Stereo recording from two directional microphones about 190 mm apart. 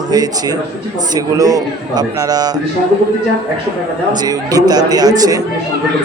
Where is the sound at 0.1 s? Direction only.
20° right (ahead or behind).